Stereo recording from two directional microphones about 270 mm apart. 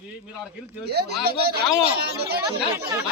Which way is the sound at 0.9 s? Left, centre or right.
Right.